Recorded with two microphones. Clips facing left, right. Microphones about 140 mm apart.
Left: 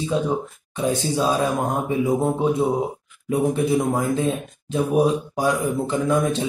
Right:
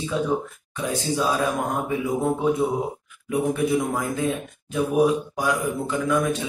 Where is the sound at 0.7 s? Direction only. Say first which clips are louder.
Left 3 dB; 30° left (ahead or behind).